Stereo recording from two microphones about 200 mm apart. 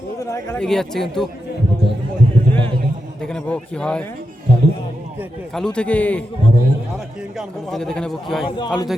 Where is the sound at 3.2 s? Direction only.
5° left (ahead or behind).